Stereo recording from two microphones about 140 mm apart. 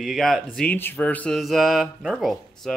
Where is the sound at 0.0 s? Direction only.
Centre (ahead or behind).